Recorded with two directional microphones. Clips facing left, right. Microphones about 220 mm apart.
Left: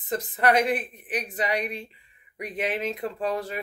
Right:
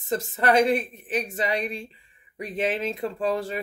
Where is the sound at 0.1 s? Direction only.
30° right (ahead or behind).